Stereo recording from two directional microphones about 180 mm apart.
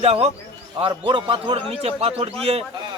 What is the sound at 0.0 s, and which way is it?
A man's voice, 35° right (ahead or behind).